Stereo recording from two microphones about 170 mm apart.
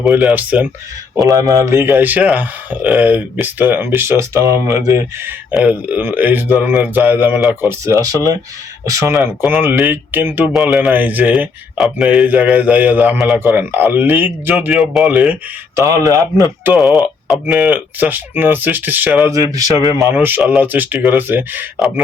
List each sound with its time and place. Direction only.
0.0 s speech: 5° right (ahead or behind); by 16.7 s 20° right (ahead or behind)
16.7 s speech: centre (ahead or behind)
19.3 s speech: 20° right (ahead or behind); by 22.0 s 5° right (ahead or behind)